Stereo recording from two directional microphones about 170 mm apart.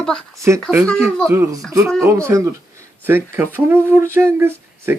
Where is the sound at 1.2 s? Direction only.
15° right (ahead or behind).